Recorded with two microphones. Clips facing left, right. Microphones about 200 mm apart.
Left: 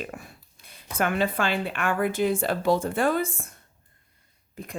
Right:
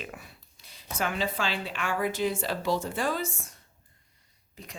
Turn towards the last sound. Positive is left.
turn(degrees=55)  # may be behind; listen again after turning